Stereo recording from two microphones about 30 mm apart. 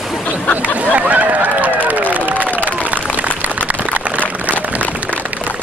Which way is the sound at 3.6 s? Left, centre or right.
Right.